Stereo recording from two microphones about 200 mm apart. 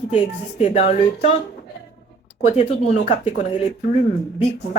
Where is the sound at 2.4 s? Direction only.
30° left (ahead or behind).